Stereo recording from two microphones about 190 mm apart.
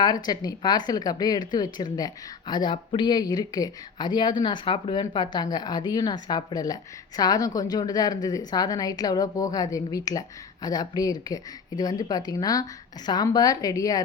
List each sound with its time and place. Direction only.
0.0 s speech: 20° left (ahead or behind)